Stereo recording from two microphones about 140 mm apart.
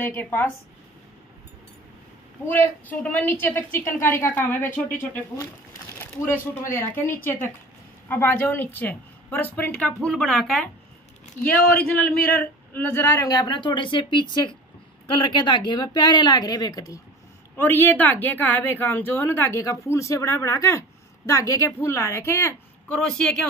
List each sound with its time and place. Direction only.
0.0 s a woman's voice: 15° left (ahead or behind)
2.4 s a woman's voice: 15° left (ahead or behind)
6.7 s a woman's voice: 15° left (ahead or behind)
11.8 s a woman's voice: 10° left (ahead or behind)
13.3 s speech: 30° left (ahead or behind)
17.6 s a woman's voice: 15° left (ahead or behind)